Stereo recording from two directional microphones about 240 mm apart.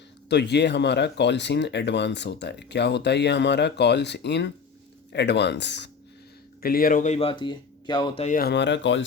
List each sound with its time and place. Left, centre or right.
0.3 s speech: left